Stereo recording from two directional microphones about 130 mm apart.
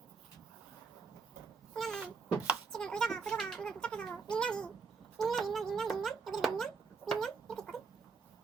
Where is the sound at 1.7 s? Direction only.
5° left (ahead or behind).